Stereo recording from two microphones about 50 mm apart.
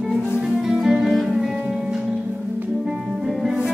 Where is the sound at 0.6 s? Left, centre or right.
Centre.